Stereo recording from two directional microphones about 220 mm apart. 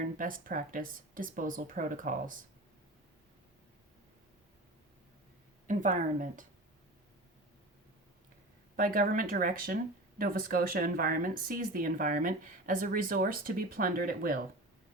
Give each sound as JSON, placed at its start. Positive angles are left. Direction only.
{"t": 0.0, "sound": "speech", "side_deg": -40}
{"t": 5.6, "sound": "speech", "side_deg": -35}
{"t": 8.7, "sound": "speech", "side_deg": -40}